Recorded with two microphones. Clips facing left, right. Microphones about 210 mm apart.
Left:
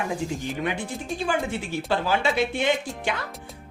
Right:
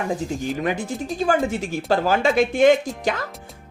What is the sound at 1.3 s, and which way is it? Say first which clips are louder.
A woman's voice: right 6 dB; 45° right (ahead or behind).